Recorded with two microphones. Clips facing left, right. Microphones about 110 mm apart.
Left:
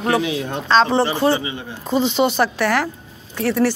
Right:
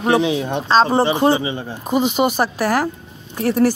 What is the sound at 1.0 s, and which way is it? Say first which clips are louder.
Speech: right 2 dB; 20° right (ahead or behind).